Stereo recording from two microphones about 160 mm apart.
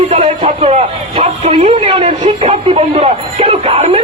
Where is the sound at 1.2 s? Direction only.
35° right (ahead or behind).